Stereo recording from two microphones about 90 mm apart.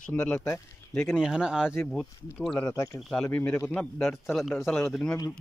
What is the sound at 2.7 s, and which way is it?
Speech, 40° left (ahead or behind).